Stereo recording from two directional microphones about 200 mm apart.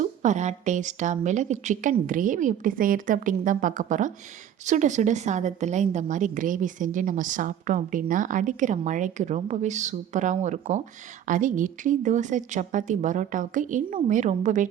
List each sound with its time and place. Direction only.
0.0 s a woman's voice: 35° right (ahead or behind)